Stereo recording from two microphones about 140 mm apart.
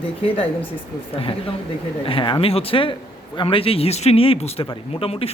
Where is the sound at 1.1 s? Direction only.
40° left (ahead or behind).